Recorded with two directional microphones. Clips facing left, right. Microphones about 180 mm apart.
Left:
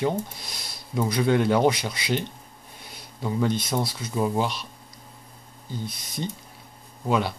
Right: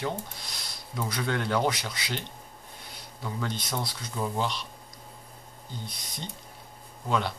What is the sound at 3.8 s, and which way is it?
Speech, 10° left (ahead or behind).